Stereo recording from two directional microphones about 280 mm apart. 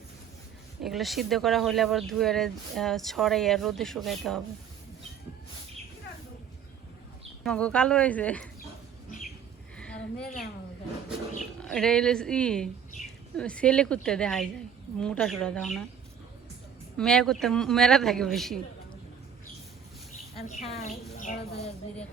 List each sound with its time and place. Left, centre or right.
0.8 s speech: centre
7.4 s speech: centre
9.7 s a sound: centre
11.6 s speech: centre
17.0 s speech: centre
20.3 s a woman's voice: left